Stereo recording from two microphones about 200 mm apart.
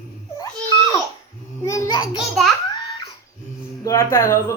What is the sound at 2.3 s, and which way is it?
Speech, centre (ahead or behind).